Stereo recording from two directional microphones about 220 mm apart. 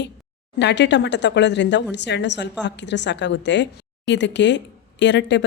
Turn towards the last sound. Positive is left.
turn(degrees=55)  # may be behind; listen again after turning